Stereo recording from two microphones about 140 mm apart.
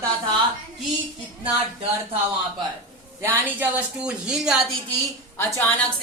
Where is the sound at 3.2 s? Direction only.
15° right (ahead or behind).